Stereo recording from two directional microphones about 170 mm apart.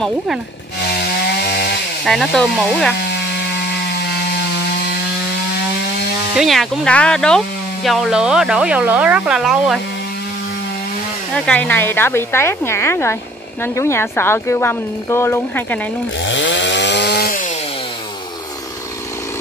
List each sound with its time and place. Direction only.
0.7 s wood: 70° left (ahead or behind)
2.0 s speech: centre (ahead or behind)
3.0 s a sound: 80° left
6.3 s speech: centre (ahead or behind)
11.3 s speech: 5° left (ahead or behind)
16.2 s chainsaw: 90° left; by 17.4 s 70° left (ahead or behind)